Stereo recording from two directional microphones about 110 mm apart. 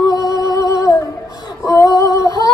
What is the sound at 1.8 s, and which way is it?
Female singing, 30° left (ahead or behind).